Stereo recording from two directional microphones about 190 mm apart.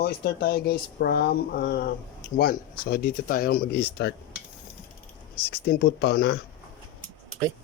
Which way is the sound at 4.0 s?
65° left (ahead or behind).